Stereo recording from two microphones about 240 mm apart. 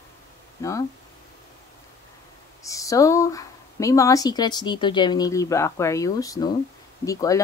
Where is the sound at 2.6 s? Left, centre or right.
Centre.